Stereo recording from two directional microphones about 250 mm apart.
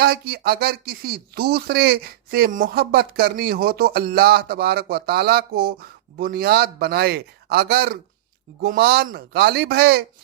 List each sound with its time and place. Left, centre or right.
0.0 s speech: right